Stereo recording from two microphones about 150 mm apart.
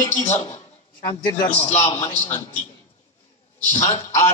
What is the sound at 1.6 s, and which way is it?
Speech, 50° left (ahead or behind).